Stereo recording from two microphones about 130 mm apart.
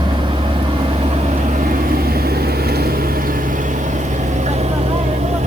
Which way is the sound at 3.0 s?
90° right.